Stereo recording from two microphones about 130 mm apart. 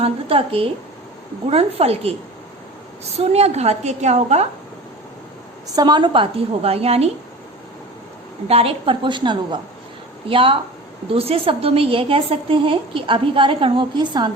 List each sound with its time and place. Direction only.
0.0 s a woman's voice: 45° right (ahead or behind)
5.6 s a woman's voice: 30° right (ahead or behind); by 7.1 s 50° right (ahead or behind)
8.4 s a woman's voice: 45° right (ahead or behind)